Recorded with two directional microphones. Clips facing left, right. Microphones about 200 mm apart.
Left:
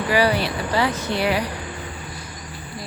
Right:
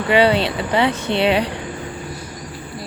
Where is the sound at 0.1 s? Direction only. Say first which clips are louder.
Right 5 dB; 25° right (ahead or behind).